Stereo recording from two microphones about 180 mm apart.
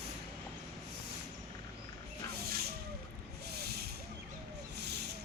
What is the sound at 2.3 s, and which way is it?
Vehicle, 60° right (ahead or behind).